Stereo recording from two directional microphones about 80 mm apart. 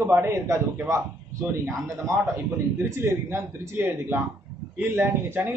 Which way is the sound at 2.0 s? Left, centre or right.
Right.